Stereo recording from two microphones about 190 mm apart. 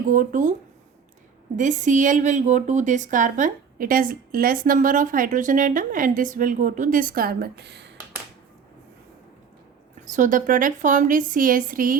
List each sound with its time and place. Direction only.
0.1 s a woman's voice: 45° right (ahead or behind)
1.5 s a woman's voice: 40° right (ahead or behind); by 7.9 s 60° right (ahead or behind)
10.1 s a woman's voice: 45° right (ahead or behind)